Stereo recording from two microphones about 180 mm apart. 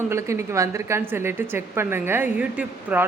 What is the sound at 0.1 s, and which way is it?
A woman's voice, 15° right (ahead or behind).